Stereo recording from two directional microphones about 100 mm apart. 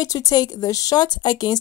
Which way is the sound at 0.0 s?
35° left (ahead or behind).